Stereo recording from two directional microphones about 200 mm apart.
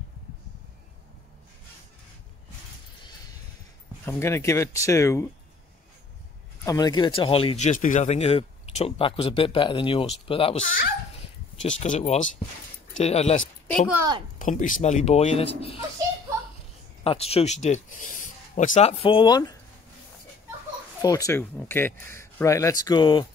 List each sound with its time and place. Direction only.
4.0 s speech: 10° left (ahead or behind)
6.6 s speech: 20° left (ahead or behind)
10.6 s speech: 45° left (ahead or behind)
11.1 s a sound: 35° left (ahead or behind)
13.0 s speech: 30° left (ahead or behind)
14.4 s speech: 40° left (ahead or behind)
17.0 s speech: 30° left (ahead or behind)
21.0 s speech: 20° left (ahead or behind)